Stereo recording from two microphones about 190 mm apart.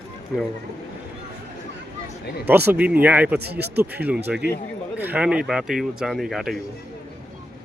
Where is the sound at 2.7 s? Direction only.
10° right (ahead or behind).